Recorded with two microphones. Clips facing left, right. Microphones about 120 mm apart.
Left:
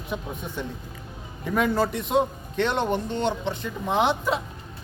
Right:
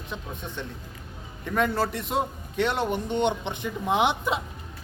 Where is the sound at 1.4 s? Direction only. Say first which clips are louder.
Left 2 dB; 5° left (ahead or behind).